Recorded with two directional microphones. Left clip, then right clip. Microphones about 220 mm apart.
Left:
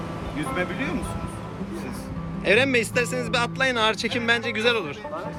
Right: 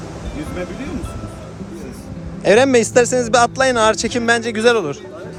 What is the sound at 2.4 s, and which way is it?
A man's voice, 10° right (ahead or behind).